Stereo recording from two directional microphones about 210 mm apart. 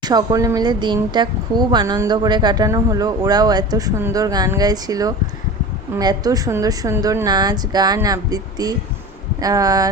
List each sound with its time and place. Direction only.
0.0 s speech: 20° right (ahead or behind)